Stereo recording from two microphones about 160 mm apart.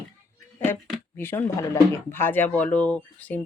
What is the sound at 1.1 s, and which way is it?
Speech, 15° left (ahead or behind).